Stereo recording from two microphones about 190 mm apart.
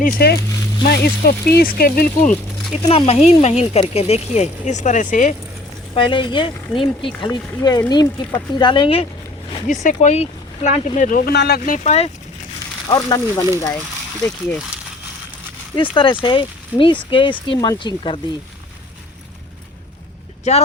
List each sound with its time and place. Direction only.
0.2 s speech: 55° left (ahead or behind)
2.9 s speech: 30° left (ahead or behind)
5.9 s speech: 25° left (ahead or behind)
9.8 s speech: 40° left (ahead or behind)
11.3 s speech: 60° left (ahead or behind); by 12.1 s 35° left (ahead or behind)
12.9 s speech: 20° left (ahead or behind)
13.7 s speech: 5° left (ahead or behind)
16.2 s speech: 25° left (ahead or behind)
20.5 s speech: 35° left (ahead or behind)